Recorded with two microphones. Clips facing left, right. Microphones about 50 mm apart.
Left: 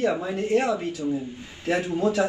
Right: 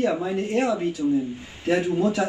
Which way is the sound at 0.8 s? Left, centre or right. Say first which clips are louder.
Right 5 dB; centre.